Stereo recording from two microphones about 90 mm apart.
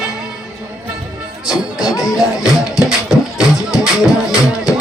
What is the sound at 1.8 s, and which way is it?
Music, 40° left (ahead or behind).